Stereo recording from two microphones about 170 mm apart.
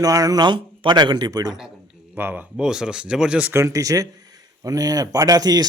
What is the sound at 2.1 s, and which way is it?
Speech, 10° right (ahead or behind).